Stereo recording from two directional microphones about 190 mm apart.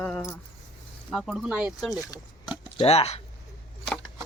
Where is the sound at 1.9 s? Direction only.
20° left (ahead or behind).